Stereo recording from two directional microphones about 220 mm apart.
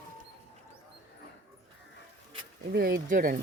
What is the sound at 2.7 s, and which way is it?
Speech, 45° right (ahead or behind).